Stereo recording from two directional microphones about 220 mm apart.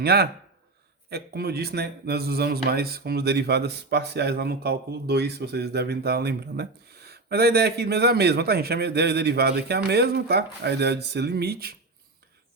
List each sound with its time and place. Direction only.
0.0 s speech: 45° right (ahead or behind)